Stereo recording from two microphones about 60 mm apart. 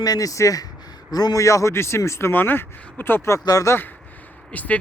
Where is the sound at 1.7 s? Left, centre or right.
Left.